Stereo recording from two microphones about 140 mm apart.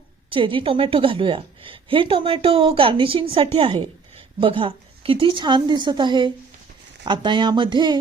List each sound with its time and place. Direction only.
0.3 s a woman's voice: 40° right (ahead or behind)